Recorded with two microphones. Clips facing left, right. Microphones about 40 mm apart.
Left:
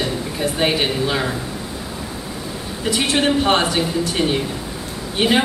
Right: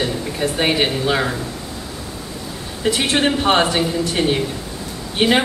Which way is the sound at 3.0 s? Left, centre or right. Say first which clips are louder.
Left 2 dB; centre.